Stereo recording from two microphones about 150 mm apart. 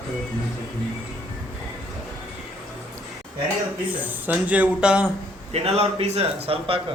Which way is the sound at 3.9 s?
10° right (ahead or behind).